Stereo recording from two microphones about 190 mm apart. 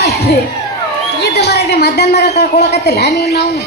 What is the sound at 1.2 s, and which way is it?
A woman's voice, 60° left (ahead or behind).